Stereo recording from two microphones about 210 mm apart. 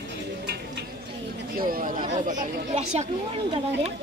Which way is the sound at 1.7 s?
40° right (ahead or behind).